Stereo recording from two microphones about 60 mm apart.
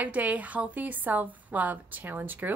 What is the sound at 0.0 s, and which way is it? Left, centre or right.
Speech, right.